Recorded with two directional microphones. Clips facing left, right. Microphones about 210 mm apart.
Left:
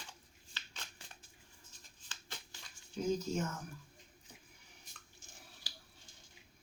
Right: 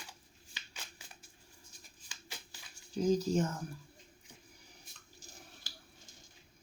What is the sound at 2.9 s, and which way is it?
Speech, 35° right (ahead or behind).